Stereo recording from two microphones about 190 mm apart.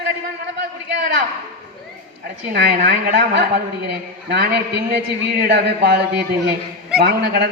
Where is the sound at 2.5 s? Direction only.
55° right (ahead or behind).